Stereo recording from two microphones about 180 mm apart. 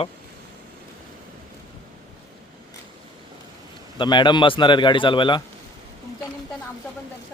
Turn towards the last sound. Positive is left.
turn(degrees=25)  # may be behind; listen again after turning